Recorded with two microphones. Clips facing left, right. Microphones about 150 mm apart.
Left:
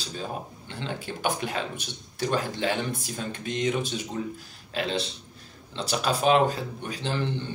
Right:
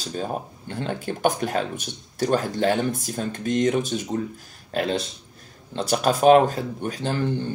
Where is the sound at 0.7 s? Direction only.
50° right (ahead or behind).